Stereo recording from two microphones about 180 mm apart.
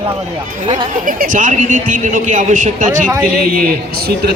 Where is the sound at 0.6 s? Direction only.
25° right (ahead or behind).